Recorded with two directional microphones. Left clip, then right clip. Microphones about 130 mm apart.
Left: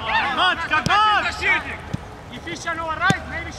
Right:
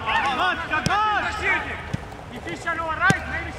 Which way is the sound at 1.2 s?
20° left (ahead or behind).